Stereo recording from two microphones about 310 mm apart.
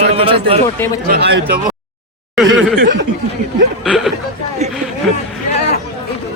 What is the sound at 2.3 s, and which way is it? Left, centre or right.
Chuckle, centre.